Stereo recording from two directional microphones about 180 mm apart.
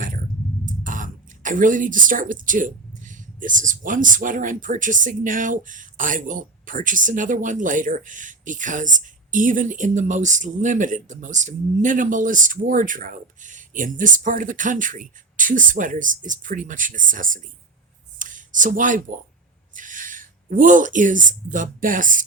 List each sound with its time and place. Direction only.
0.6 s speech: 45° right (ahead or behind)
18.2 s a sound: 45° right (ahead or behind)
19.7 s speech: 45° right (ahead or behind)